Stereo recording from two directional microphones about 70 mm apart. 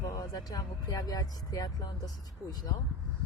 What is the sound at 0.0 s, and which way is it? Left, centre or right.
Speech, left.